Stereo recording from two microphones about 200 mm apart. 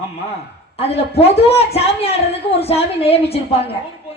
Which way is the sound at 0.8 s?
30° left (ahead or behind).